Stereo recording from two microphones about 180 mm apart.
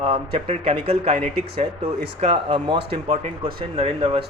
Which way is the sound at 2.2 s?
30° right (ahead or behind).